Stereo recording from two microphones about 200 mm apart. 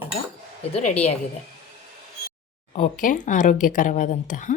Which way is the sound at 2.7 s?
40° left (ahead or behind).